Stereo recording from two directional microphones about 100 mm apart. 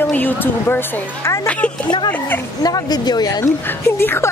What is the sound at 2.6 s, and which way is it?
Speech, 40° left (ahead or behind).